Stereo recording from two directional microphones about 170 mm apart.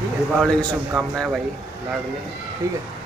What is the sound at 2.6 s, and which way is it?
Speech, 15° right (ahead or behind).